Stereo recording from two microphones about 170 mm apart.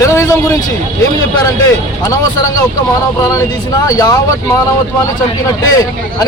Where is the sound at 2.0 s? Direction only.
20° left (ahead or behind).